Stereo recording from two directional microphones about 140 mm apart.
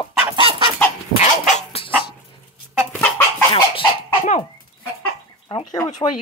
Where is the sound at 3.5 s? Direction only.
40° left (ahead or behind).